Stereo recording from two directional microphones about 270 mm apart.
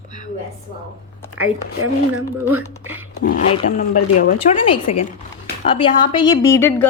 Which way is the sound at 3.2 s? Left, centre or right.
Left.